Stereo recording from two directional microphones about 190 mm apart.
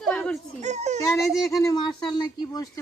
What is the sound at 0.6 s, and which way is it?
Baby cry, 35° right (ahead or behind).